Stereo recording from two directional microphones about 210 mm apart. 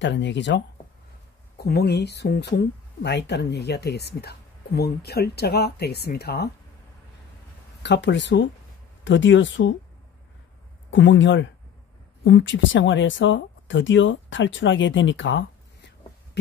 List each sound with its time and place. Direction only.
0.0 s speech: 55° left (ahead or behind)
7.8 s speech: 55° left (ahead or behind)
10.9 s speech: 60° left (ahead or behind)